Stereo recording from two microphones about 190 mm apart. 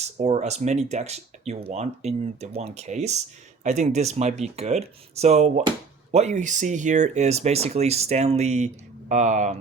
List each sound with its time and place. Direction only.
0.0 s speech: 35° right (ahead or behind)